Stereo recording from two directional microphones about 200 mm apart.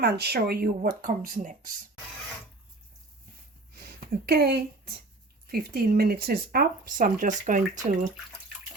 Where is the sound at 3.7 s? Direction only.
50° right (ahead or behind).